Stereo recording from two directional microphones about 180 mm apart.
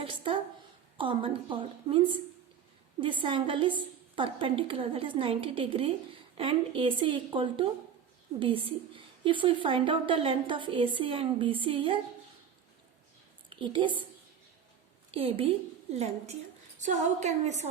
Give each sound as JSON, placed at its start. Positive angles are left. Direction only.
{"t": 0.0, "sound": "a sound", "side_deg": -30}
{"t": 0.9, "sound": "a woman's voice", "side_deg": -30}
{"t": 13.5, "sound": "a woman's voice", "side_deg": -25}
{"t": 15.1, "sound": "a woman's voice", "side_deg": -30}